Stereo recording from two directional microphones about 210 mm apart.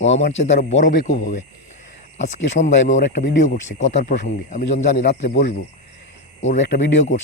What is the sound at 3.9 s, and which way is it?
Speech, 55° left (ahead or behind).